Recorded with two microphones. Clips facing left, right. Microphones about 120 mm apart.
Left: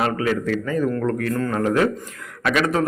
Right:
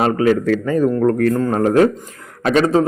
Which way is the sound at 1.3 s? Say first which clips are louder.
Right 5 dB; 30° right (ahead or behind).